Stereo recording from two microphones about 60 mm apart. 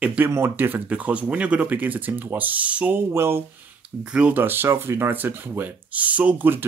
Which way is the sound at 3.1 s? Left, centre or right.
Right.